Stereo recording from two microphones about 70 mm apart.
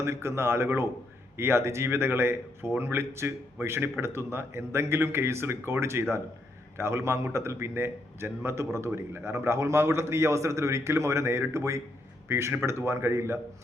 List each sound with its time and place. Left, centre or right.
0.0 s speech: right